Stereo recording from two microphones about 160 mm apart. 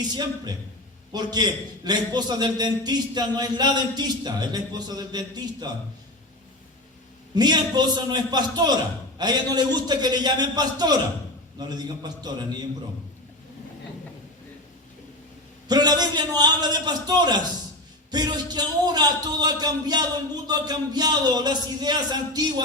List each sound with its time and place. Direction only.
0.1 s a man's voice: 25° right (ahead or behind)
7.3 s a man's voice: 25° right (ahead or behind)
15.6 s a man's voice: 25° right (ahead or behind)